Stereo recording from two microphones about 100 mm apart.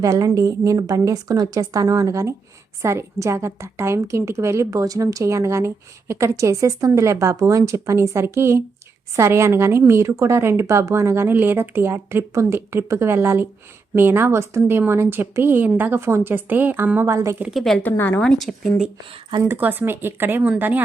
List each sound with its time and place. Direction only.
0.0 s a woman's voice: 35° right (ahead or behind)
17.1 s speech: 30° right (ahead or behind)
17.5 s speech: centre (ahead or behind)
17.8 s a woman's voice: 20° left (ahead or behind)
18.2 s speech: 5° left (ahead or behind)
19.5 s a woman's voice: 20° right (ahead or behind)